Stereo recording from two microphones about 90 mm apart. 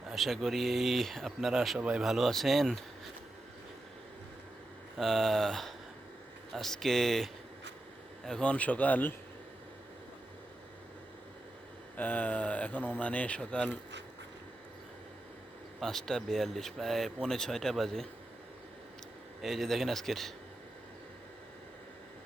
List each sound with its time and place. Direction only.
0.1 s speech: centre (ahead or behind)
4.9 s speech: 5° left (ahead or behind); by 9.1 s 20° left (ahead or behind)
11.9 s speech: 20° left (ahead or behind)
15.8 s speech: 5° left (ahead or behind)
19.4 s speech: centre (ahead or behind)